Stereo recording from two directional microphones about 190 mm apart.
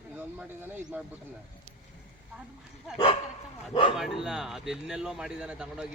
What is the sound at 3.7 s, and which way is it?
Speech, 30° left (ahead or behind).